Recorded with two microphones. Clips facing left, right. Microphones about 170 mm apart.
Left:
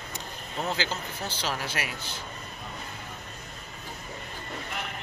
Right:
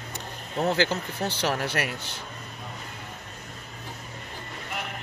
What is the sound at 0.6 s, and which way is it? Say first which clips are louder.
A man's voice: right 7 dB; 60° right (ahead or behind).